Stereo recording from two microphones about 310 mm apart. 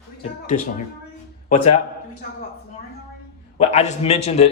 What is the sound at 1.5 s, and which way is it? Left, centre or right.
Speech, left.